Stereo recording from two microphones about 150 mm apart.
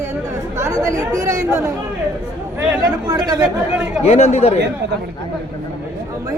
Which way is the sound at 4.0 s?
45° left (ahead or behind).